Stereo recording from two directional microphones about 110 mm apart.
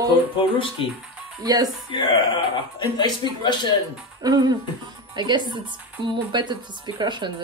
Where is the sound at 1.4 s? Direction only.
35° right (ahead or behind).